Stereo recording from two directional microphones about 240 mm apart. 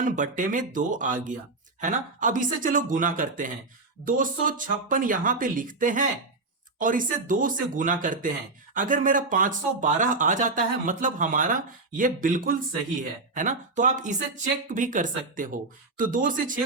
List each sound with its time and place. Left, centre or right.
0.0 s speech: right